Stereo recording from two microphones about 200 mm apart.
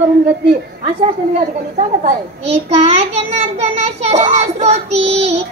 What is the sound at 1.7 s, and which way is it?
A child's voice, 35° right (ahead or behind).